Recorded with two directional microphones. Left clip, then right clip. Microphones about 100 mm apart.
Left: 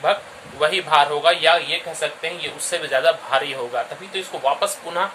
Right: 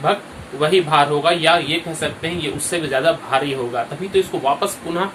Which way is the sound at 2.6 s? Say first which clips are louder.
Even; 45° left (ahead or behind).